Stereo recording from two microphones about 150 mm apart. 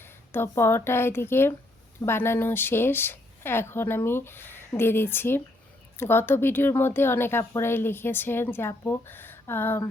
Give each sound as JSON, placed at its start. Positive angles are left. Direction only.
{"t": 0.0, "sound": "speech", "side_deg": 15}